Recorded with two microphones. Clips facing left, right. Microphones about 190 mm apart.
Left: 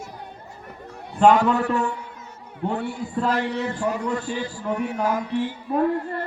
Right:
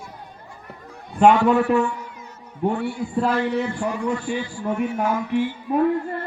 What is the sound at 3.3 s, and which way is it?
A man's voice, 40° left (ahead or behind).